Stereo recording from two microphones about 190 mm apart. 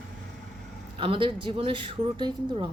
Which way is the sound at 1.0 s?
25° right (ahead or behind).